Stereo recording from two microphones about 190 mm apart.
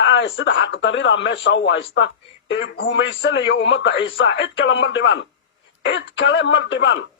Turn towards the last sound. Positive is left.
turn(degrees=70)  # may be behind; listen again after turning